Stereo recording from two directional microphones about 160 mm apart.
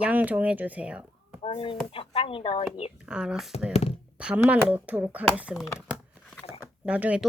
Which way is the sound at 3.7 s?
40° left (ahead or behind).